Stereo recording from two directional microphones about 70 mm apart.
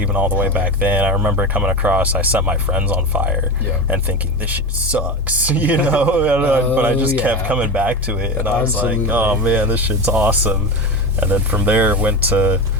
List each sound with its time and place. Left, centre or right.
0.0 s speech: right